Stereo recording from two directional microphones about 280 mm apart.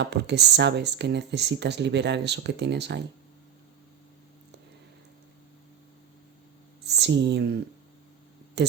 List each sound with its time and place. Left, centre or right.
0.0 s speech: right
6.8 s speech: right